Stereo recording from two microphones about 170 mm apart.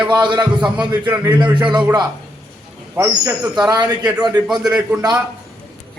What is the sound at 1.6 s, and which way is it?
A man's voice, 25° right (ahead or behind).